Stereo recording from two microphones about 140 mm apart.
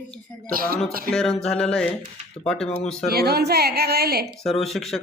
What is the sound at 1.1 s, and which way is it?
A man's voice, 5° left (ahead or behind).